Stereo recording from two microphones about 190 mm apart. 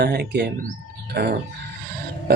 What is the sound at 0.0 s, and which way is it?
Speech, 60° right (ahead or behind).